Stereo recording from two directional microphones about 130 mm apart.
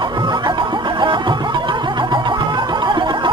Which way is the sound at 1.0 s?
40° right (ahead or behind).